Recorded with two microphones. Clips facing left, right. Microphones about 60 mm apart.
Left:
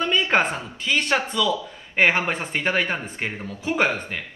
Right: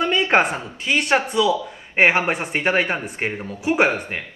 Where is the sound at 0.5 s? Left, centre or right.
Right.